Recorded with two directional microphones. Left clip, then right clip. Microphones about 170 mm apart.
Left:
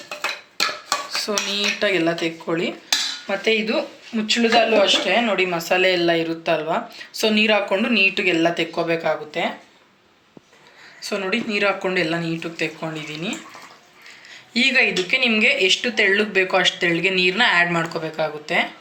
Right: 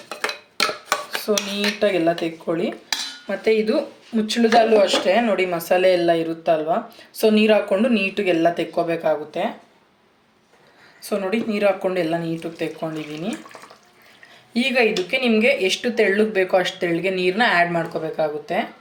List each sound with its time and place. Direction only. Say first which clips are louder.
0.9 s dishes: right 1 dB; 35° right (ahead or behind)
3.2 s speech: right 3 dB; 45° right (ahead or behind)
11.0 s speech: even; 40° right (ahead or behind)
14.5 s speech: left 2 dB; 35° right (ahead or behind)